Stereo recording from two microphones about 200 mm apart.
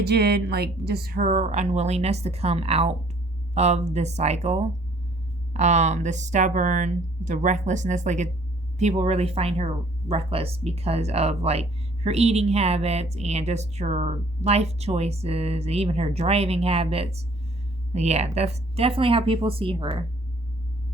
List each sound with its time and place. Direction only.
0.0 s speech: 55° right (ahead or behind); by 20.1 s 25° right (ahead or behind)